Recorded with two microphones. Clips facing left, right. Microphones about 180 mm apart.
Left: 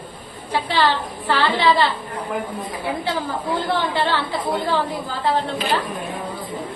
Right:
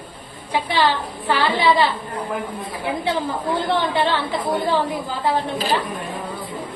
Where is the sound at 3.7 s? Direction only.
20° right (ahead or behind).